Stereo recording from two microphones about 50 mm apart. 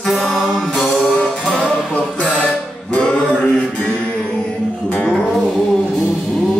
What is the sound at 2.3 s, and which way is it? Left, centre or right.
Music, left.